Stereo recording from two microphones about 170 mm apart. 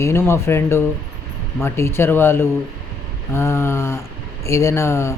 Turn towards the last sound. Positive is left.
turn(degrees=15)  # may be behind; listen again after turning